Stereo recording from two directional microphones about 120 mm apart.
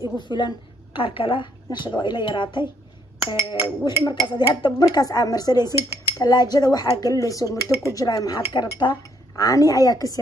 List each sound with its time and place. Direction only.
0.2 s a woman's voice: 40° left (ahead or behind)
3.6 s speech: 35° left (ahead or behind)
9.3 s a woman's voice: 30° left (ahead or behind)